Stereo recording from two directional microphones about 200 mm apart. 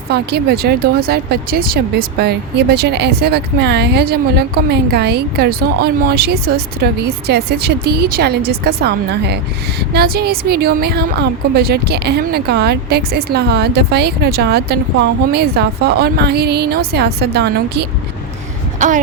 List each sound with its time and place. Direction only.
0.1 s speech: 55° right (ahead or behind)